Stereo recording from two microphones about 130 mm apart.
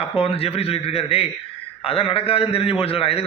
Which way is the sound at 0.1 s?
50° left (ahead or behind).